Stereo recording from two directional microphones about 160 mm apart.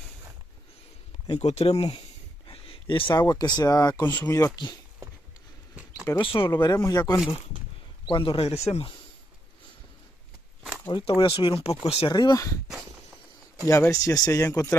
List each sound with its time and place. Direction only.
1.4 s speech: 40° left (ahead or behind); by 4.5 s 20° left (ahead or behind)
6.0 s speech: 30° left (ahead or behind)
8.1 s speech: 30° left (ahead or behind)
10.9 s speech: 30° left (ahead or behind)
12.1 s speech: 25° left (ahead or behind)
13.7 s speech: 20° left (ahead or behind)